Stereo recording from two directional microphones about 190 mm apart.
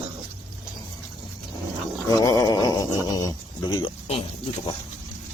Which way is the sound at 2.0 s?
20° left (ahead or behind).